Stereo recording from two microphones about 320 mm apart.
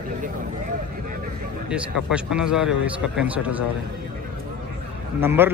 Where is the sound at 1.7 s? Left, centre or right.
Centre.